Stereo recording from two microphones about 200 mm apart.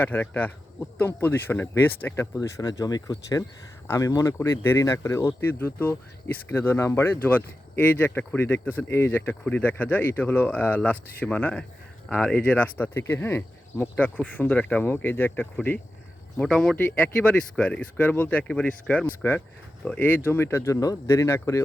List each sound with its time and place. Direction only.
0.0 s speech: 10° left (ahead or behind)